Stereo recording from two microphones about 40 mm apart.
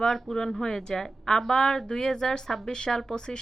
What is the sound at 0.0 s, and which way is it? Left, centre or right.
A woman's voice, centre.